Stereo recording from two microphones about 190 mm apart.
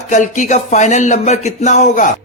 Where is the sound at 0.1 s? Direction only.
40° left (ahead or behind).